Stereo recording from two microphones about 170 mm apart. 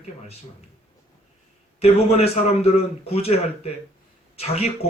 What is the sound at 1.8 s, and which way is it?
Speech, 35° left (ahead or behind).